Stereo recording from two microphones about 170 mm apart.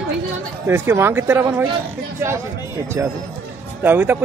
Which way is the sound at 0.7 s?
15° right (ahead or behind).